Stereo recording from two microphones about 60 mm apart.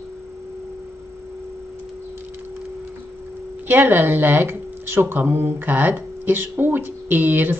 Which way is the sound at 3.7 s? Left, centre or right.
Right.